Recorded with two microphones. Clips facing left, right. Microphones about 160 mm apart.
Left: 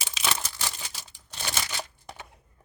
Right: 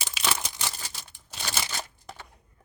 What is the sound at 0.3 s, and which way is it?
Crumpling, 15° right (ahead or behind).